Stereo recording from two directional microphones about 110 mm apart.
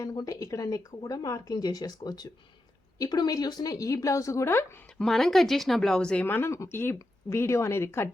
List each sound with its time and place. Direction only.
0.0 s speech: 35° left (ahead or behind); by 4.8 s 20° left (ahead or behind)
4.9 s speech: 5° left (ahead or behind); by 8.1 s 25° left (ahead or behind)